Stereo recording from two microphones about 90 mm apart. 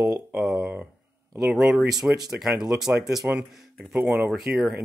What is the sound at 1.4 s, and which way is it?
Speech, 5° right (ahead or behind).